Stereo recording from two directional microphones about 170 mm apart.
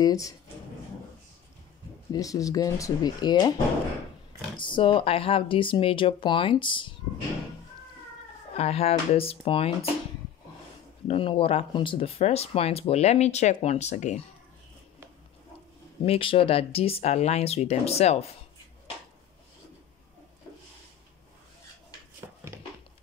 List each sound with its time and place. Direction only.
0.0 s speech: 20° left (ahead or behind)
2.1 s speech: 20° left (ahead or behind)
4.6 s speech: 30° left (ahead or behind)
8.5 s speech: 35° left (ahead or behind)
11.1 s speech: 30° left (ahead or behind)
16.1 s speech: 30° left (ahead or behind)